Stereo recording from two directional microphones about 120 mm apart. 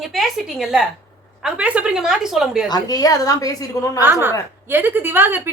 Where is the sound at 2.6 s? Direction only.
35° left (ahead or behind).